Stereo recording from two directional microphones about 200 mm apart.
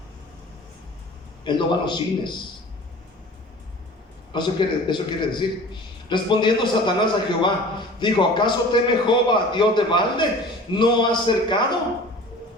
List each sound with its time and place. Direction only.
1.5 s a man's voice: 25° left (ahead or behind)
4.3 s a man's voice: 20° left (ahead or behind)